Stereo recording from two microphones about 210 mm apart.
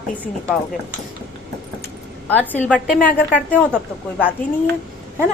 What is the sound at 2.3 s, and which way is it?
Speech, 10° left (ahead or behind).